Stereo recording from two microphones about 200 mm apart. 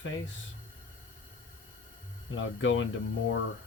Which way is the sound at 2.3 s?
70° left (ahead or behind).